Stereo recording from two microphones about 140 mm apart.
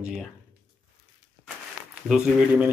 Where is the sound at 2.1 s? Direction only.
10° right (ahead or behind).